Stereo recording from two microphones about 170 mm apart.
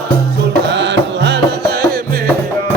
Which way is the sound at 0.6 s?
90° right.